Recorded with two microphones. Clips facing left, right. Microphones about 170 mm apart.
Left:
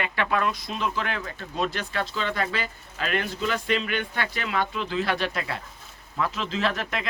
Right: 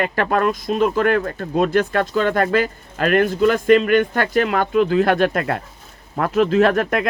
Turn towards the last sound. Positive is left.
turn(degrees=-50)  # may be behind; listen again after turning